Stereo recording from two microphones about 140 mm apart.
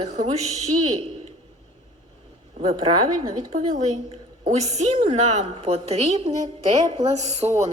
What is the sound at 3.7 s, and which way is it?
A woman's voice, 50° right (ahead or behind).